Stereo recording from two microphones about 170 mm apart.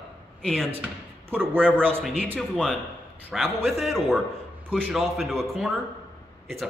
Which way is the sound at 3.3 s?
Centre (ahead or behind).